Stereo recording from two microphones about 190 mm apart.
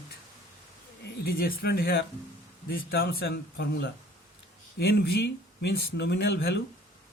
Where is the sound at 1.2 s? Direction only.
55° left (ahead or behind).